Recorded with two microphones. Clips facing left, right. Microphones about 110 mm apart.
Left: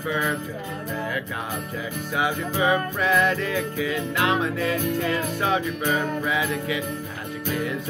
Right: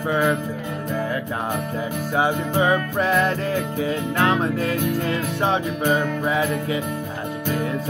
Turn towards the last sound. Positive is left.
turn(degrees=-40)  # may be behind; listen again after turning